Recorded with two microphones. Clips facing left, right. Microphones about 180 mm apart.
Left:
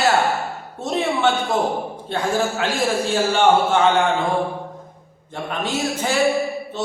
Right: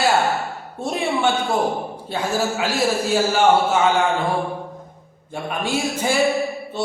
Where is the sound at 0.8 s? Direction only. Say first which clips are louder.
Left 1 dB; 10° right (ahead or behind).